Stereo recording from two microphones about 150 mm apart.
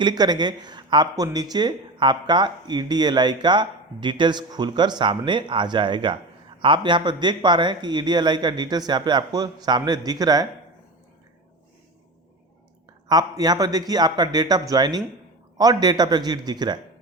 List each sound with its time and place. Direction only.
0.0 s speech: 25° right (ahead or behind)
13.1 s speech: 25° right (ahead or behind)